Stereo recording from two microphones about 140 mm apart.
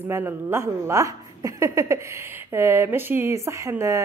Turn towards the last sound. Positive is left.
turn(degrees=-20)  # may be behind; listen again after turning